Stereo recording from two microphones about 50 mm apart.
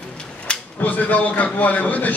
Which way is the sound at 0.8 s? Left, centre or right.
Left.